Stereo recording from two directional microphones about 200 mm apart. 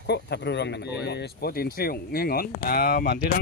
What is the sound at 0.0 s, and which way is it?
Speech, 55° left (ahead or behind).